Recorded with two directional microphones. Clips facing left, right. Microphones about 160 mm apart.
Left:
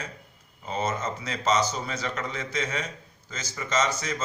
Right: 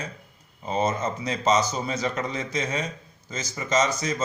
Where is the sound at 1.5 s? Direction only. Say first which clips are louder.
Right 2 dB; 25° right (ahead or behind).